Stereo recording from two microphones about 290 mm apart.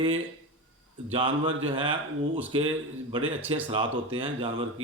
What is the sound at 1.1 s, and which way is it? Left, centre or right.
Speech, centre.